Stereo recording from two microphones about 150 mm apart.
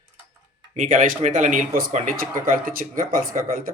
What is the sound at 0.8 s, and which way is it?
Speech, 60° right (ahead or behind).